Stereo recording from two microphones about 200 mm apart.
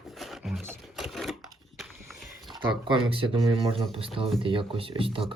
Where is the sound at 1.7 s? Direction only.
Centre (ahead or behind).